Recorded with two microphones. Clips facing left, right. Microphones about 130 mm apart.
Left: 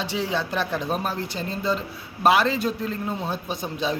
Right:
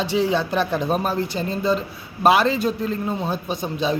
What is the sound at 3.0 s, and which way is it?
Speech, 25° right (ahead or behind).